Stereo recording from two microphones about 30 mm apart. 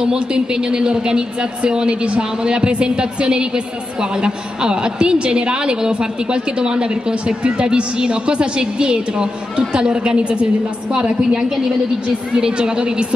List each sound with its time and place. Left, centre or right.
0.0 s a man's voice: right